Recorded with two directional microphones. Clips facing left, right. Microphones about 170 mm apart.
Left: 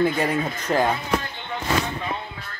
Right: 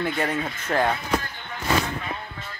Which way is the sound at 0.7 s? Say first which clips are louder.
Left 2 dB; 20° left (ahead or behind).